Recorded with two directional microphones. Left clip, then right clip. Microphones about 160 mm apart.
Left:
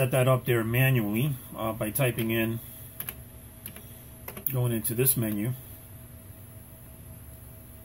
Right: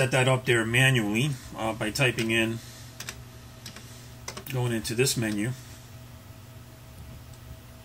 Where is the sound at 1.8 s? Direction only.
30° left (ahead or behind).